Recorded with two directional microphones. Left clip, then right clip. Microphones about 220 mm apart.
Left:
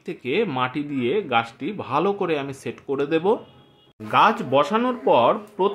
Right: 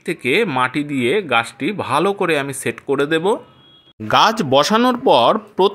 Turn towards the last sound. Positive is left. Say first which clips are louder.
# right 5 dB
turn(degrees=-50)  # may be behind; listen again after turning